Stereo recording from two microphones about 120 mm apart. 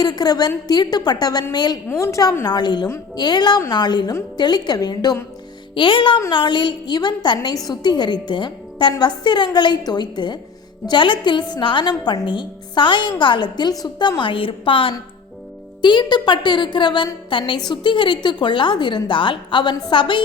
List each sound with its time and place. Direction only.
0.0 s a woman's voice: 35° left (ahead or behind)
1.9 s a woman's voice: 25° left (ahead or behind)
5.7 s music: 45° left (ahead or behind)
6.3 s a woman's voice: 40° left (ahead or behind)